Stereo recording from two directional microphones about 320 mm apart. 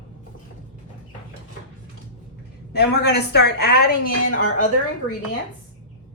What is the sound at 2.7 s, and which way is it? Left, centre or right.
A woman's voice, left.